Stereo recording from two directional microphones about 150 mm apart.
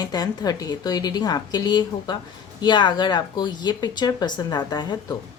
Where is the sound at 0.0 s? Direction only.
25° left (ahead or behind).